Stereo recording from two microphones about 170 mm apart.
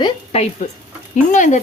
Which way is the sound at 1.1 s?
45° left (ahead or behind).